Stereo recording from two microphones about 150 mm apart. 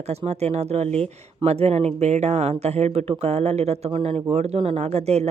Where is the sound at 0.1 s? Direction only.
45° right (ahead or behind).